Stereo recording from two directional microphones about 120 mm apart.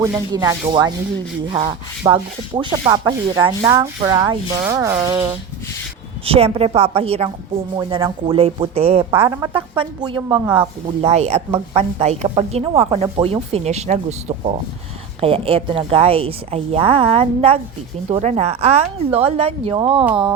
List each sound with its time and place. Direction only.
0.0 s rub: 25° right (ahead or behind)
6.2 s speech: 55° right (ahead or behind)
7.8 s speech: 40° right (ahead or behind)
9.5 s rub: 40° right (ahead or behind)
10.4 s rub: 20° right (ahead or behind)
10.8 s a woman's voice: 60° right (ahead or behind)
15.2 s a woman's voice: 50° right (ahead or behind)
18.2 s a woman's voice: 70° right (ahead or behind); by 20.1 s 50° right (ahead or behind)